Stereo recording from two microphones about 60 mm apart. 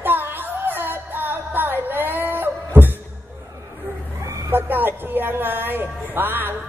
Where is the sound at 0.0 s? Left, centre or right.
Right.